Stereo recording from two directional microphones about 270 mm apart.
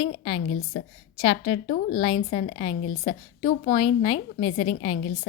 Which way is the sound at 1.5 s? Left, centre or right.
Left.